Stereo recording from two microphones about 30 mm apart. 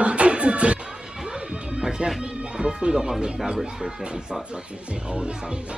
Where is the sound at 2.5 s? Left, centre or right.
Right.